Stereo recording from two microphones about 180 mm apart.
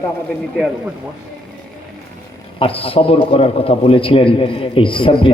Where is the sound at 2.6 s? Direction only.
30° left (ahead or behind).